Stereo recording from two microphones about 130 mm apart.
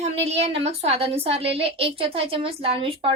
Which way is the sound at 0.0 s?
55° right (ahead or behind).